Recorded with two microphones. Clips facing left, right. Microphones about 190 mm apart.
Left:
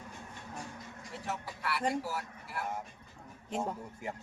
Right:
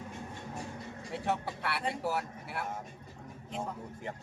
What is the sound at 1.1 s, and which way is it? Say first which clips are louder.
Speech: right 6 dB; 65° right (ahead or behind).